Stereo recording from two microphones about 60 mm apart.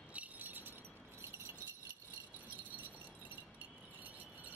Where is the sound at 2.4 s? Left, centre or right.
Right.